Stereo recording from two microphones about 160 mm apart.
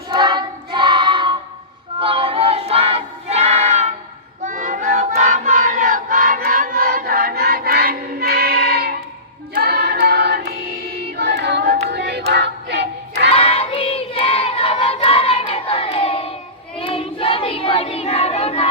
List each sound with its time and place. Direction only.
0.1 s child singing: 30° right (ahead or behind)
4.4 s choir: 50° right (ahead or behind); by 9.0 s 70° right (ahead or behind)
9.6 s singing: 75° right (ahead or behind)
11.2 s a sound: 90° right
12.3 s choir: 90° right
13.3 s crowd: 35° left (ahead or behind)
16.7 s child singing: 35° left (ahead or behind)